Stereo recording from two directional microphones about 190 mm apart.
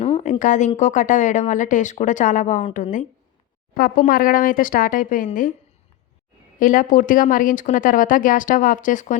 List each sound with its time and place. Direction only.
0.0 s a sound: 35° left (ahead or behind)
0.8 s a woman's voice: 40° left (ahead or behind)
6.6 s a woman's voice: 45° left (ahead or behind)